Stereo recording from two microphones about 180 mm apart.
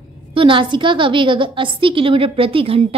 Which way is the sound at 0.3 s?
30° right (ahead or behind).